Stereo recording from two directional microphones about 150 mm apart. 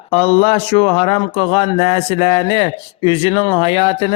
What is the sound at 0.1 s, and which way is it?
Speech, 40° left (ahead or behind).